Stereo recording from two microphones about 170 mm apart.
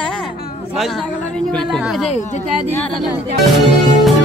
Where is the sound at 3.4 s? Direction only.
Centre (ahead or behind).